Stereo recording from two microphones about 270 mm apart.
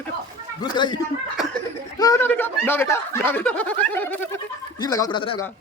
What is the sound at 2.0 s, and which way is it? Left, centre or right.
Speech, centre.